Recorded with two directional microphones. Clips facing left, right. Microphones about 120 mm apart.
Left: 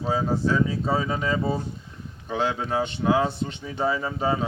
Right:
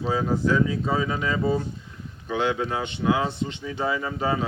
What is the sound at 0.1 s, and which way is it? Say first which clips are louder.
Speech: even; 30° left (ahead or behind).